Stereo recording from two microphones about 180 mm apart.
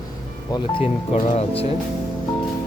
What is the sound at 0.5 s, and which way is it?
Speech, 30° left (ahead or behind).